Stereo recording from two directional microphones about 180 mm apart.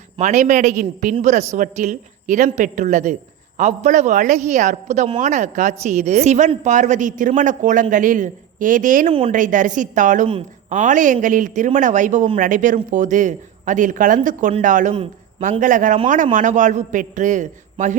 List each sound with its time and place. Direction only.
0.2 s a man's voice: 40° right (ahead or behind)